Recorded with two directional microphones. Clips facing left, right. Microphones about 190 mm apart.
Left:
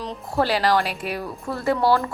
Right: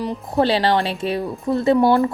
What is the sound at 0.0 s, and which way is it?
A woman's voice, 15° right (ahead or behind).